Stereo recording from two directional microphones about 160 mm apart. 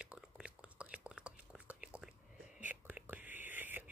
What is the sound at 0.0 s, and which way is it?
Whispering, 5° right (ahead or behind).